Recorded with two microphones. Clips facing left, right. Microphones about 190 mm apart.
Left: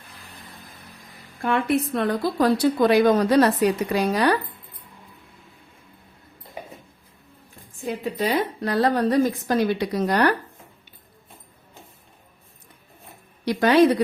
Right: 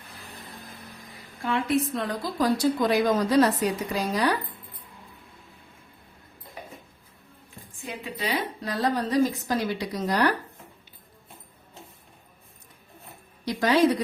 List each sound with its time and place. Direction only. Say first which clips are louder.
1.4 s a woman's voice: left 3 dB; 55° left (ahead or behind)
7.8 s a woman's voice: left 8 dB; 45° left (ahead or behind); by 10.2 s 65° left (ahead or behind)
13.4 s a woman's voice: left 5 dB; 65° left (ahead or behind)